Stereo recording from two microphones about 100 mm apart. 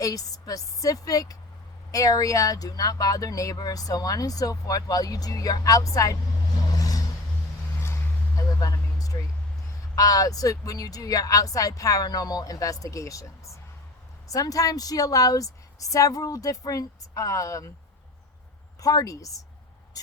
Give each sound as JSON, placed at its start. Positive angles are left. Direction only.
{"t": 0.0, "sound": "speech", "side_deg": 35}
{"t": 6.7, "sound": "vehicle", "side_deg": 35}
{"t": 8.4, "sound": "a sound", "side_deg": 35}
{"t": 9.9, "sound": "speech", "side_deg": 35}
{"t": 18.8, "sound": "speech", "side_deg": 35}